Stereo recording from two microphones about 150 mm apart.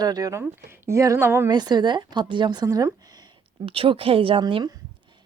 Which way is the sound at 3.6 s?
35° right (ahead or behind).